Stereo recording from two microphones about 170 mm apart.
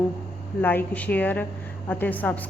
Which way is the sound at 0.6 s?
10° left (ahead or behind).